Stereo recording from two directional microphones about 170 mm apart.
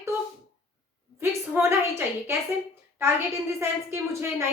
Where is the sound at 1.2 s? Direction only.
15° right (ahead or behind).